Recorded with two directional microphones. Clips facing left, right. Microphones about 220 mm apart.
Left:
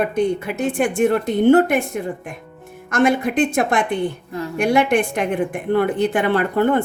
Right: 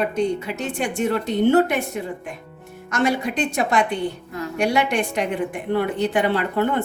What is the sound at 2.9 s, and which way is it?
A woman's voice, 55° left (ahead or behind).